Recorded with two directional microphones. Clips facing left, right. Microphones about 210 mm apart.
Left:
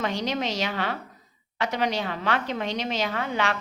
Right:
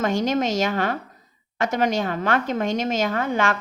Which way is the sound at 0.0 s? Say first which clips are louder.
Right 6 dB; 45° right (ahead or behind).